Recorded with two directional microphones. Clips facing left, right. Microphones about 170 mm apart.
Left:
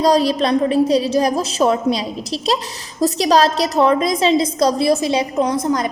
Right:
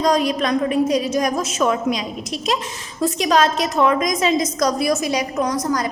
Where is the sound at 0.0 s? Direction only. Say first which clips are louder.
Left 3 dB; 35° left (ahead or behind).